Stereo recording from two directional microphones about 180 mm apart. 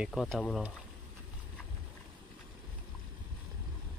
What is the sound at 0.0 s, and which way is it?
Speech, centre (ahead or behind).